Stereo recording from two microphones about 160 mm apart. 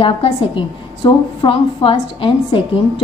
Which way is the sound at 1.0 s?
30° left (ahead or behind).